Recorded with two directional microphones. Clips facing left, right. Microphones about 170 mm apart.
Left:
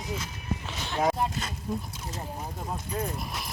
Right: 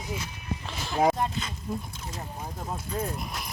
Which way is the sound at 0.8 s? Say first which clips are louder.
Right 3 dB; 5° right (ahead or behind).